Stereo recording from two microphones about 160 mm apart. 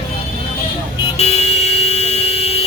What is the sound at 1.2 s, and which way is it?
Vehicle, 40° left (ahead or behind).